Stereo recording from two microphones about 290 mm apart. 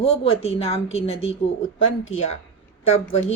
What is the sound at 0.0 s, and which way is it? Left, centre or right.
A woman's voice, left.